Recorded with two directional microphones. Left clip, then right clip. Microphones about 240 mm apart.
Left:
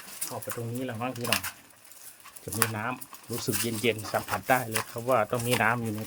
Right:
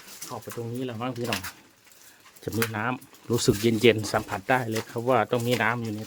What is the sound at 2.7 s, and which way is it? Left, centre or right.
Speech, right.